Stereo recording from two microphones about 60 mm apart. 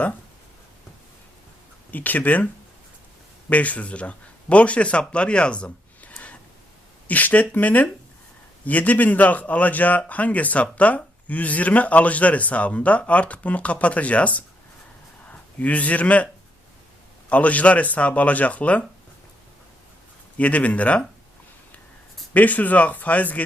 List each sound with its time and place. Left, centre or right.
1.9 s a man's voice: left
3.5 s a man's voice: left
20.4 s a man's voice: left
22.4 s a man's voice: left